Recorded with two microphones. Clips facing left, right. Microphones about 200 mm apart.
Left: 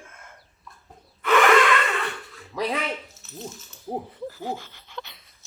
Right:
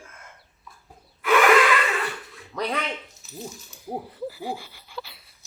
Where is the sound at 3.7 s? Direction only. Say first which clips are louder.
Left 2 dB; 10° right (ahead or behind).